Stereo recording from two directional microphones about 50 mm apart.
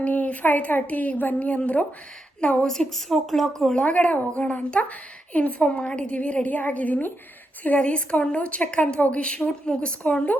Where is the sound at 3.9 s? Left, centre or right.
Left.